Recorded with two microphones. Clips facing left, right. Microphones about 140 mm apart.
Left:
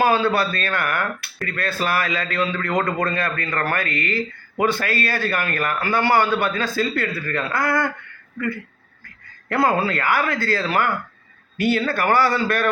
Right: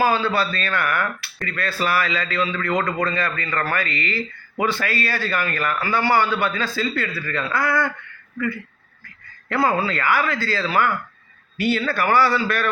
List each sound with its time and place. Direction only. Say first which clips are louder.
0.0 s a man's voice: left 2 dB; 55° left (ahead or behind)
9.5 s a man's voice: left 1 dB; 55° left (ahead or behind)